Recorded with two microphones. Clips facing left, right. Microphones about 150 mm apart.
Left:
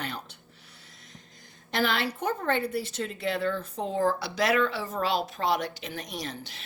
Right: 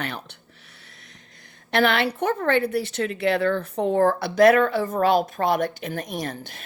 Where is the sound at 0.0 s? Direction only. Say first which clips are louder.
Right 4 dB; 70° right (ahead or behind).